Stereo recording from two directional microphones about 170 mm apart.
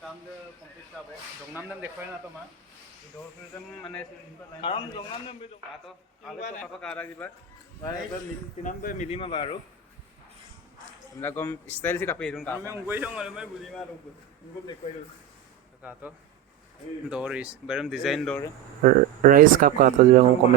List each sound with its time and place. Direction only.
1.5 s speech: 10° right (ahead or behind)
4.6 s a man's voice: 30° left (ahead or behind)
6.6 s a man's voice: 10° left (ahead or behind)
8.6 s speech: 50° left (ahead or behind)
9.0 s speech: 35° left (ahead or behind)
11.2 s a man's voice: 15° left (ahead or behind)
12.6 s speech: 15° right (ahead or behind)
15.8 s speech: 10° right (ahead or behind)
18.8 s speech: 50° right (ahead or behind)